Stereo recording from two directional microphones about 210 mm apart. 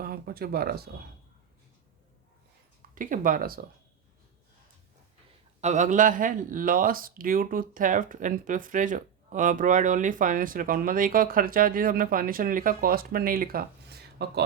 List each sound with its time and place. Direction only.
0.0 s speech: 45° right (ahead or behind)
2.9 s speech: 40° right (ahead or behind)
5.5 s speech: 35° right (ahead or behind); by 14.4 s 50° right (ahead or behind)